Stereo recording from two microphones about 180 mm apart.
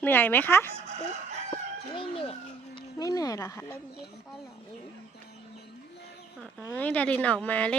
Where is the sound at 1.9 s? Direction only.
30° left (ahead or behind).